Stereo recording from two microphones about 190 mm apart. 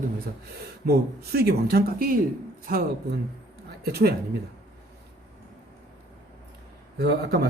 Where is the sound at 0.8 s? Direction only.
55° right (ahead or behind).